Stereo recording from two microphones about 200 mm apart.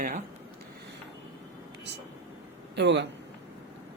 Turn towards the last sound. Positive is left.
turn(degrees=-60)  # may be behind; listen again after turning